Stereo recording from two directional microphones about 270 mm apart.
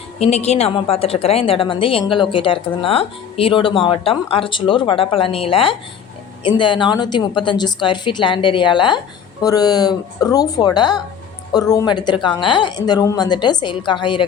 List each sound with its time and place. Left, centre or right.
0.2 s a woman's voice: left